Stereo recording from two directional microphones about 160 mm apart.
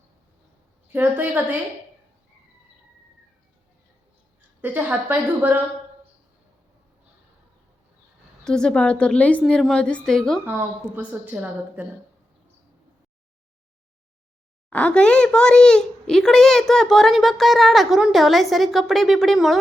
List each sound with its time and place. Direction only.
0.9 s a woman's voice: 10° right (ahead or behind)
4.6 s a woman's voice: 10° right (ahead or behind)
8.4 s a woman's voice: 5° left (ahead or behind)
10.4 s a woman's voice: 15° right (ahead or behind)
14.7 s speech: 5° left (ahead or behind)